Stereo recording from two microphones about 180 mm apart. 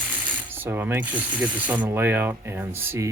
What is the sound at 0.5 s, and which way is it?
Ratchet, 10° right (ahead or behind).